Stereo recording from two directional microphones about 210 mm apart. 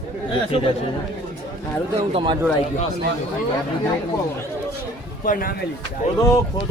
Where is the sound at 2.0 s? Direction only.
25° right (ahead or behind).